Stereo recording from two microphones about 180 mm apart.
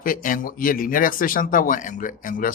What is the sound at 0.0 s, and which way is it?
A man's voice, 50° left (ahead or behind).